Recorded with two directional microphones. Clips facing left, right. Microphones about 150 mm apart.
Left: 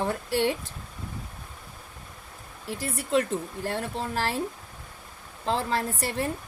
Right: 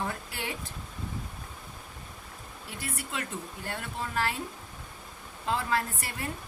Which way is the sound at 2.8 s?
40° left (ahead or behind).